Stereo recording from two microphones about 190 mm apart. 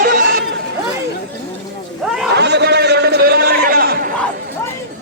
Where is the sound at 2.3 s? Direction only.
60° right (ahead or behind).